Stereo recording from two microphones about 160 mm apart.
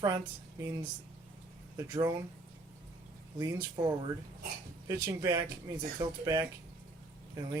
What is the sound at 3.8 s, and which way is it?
Speech, 20° right (ahead or behind).